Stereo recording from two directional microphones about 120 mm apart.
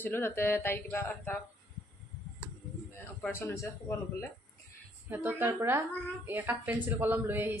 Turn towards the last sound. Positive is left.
turn(degrees=-20)  # may be behind; listen again after turning